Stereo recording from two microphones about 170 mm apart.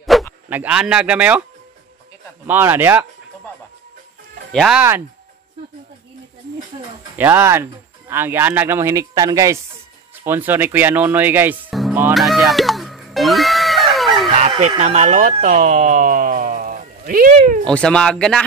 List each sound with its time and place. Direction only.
0.0 s a sound: centre (ahead or behind)
0.5 s speech: 10° right (ahead or behind)
2.4 s speech: 15° right (ahead or behind)
4.5 s speech: centre (ahead or behind)
7.2 s speech: 15° right (ahead or behind)
12.1 s music: centre (ahead or behind)
14.8 s speech: 45° right (ahead or behind)
17.6 s speech: 5° left (ahead or behind)